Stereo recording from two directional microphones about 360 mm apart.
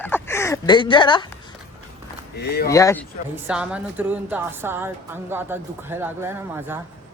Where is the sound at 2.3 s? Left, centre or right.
Left.